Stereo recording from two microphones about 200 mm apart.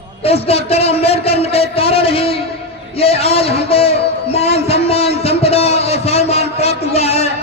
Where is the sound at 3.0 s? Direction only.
30° left (ahead or behind).